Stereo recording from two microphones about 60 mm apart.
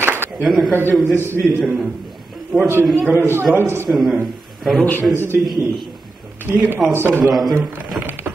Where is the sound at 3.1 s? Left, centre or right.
Right.